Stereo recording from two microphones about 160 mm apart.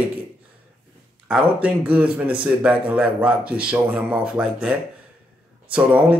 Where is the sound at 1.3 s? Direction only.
5° right (ahead or behind).